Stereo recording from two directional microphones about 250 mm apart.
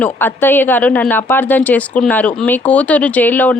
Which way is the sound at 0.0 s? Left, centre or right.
Centre.